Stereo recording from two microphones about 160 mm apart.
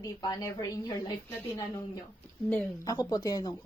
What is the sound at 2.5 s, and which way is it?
A woman's voice, 20° left (ahead or behind).